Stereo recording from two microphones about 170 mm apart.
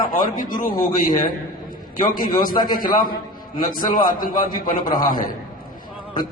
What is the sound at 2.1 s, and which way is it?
A man's voice, 55° left (ahead or behind).